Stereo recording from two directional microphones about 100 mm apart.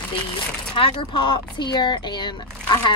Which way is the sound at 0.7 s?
50° left (ahead or behind).